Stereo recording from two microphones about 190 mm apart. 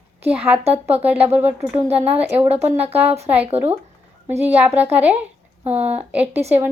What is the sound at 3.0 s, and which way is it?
Speech, 35° right (ahead or behind).